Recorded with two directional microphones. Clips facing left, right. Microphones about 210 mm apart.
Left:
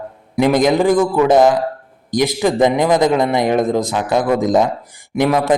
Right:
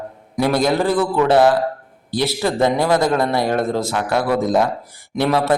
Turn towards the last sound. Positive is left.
turn(degrees=15)  # may be behind; listen again after turning